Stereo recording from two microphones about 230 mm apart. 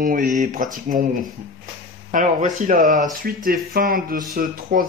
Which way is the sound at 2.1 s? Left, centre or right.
Right.